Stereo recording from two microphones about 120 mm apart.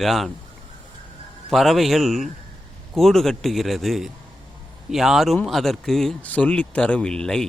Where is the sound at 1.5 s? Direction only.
Centre (ahead or behind).